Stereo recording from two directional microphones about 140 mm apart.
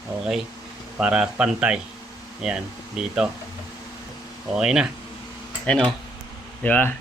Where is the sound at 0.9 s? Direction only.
5° right (ahead or behind).